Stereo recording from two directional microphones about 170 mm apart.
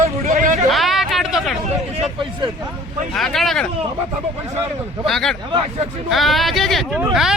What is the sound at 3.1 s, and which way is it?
Speech, centre (ahead or behind).